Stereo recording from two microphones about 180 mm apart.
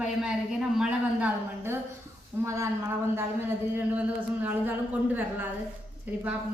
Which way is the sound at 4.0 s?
10° right (ahead or behind).